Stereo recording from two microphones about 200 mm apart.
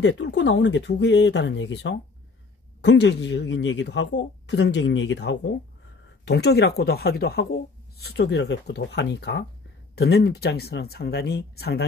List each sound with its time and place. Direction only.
0.0 s speech: 60° left (ahead or behind)